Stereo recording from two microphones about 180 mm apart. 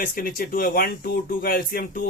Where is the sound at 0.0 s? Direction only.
55° left (ahead or behind).